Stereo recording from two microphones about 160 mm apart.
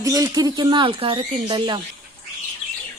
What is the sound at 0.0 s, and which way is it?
Speech, 20° right (ahead or behind).